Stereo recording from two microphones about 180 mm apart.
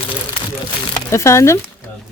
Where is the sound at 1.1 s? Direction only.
15° left (ahead or behind).